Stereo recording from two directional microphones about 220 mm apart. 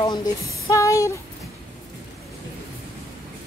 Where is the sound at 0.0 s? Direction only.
20° left (ahead or behind).